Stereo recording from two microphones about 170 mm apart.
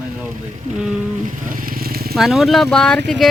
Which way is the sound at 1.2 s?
50° right (ahead or behind).